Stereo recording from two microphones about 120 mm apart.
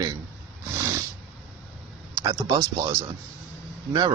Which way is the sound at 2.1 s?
30° right (ahead or behind).